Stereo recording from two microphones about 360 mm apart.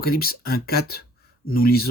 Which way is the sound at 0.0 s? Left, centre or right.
Left.